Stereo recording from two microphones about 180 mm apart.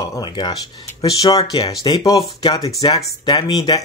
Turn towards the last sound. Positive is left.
turn(degrees=20)  # may be behind; listen again after turning